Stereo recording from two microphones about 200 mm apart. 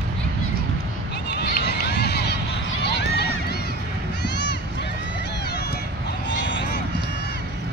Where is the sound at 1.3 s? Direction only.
55° left (ahead or behind).